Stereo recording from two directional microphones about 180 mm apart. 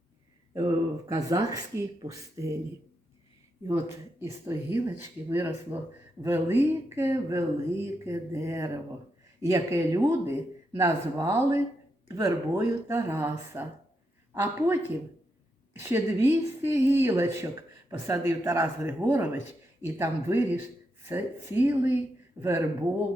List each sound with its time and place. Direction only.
1.0 s speech: 20° right (ahead or behind)
3.7 s speech: 15° right (ahead or behind)